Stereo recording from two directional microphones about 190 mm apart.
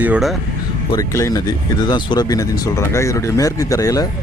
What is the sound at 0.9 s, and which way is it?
Speech, 15° left (ahead or behind).